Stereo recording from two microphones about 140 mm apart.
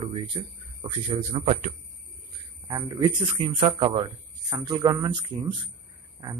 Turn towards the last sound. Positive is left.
turn(degrees=-30)  # may be behind; listen again after turning